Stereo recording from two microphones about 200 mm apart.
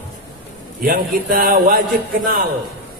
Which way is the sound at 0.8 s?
45° right (ahead or behind).